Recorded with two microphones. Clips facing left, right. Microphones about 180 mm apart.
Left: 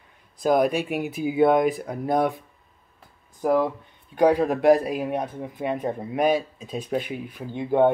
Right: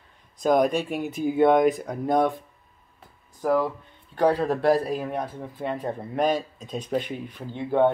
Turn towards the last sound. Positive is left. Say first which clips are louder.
# left 2 dB
turn(degrees=15)  # may be behind; listen again after turning